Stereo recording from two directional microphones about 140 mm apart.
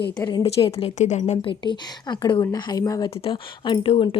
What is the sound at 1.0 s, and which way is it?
Speech, 55° left (ahead or behind).